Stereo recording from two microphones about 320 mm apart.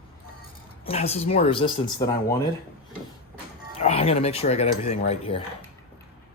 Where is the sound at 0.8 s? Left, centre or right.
Centre.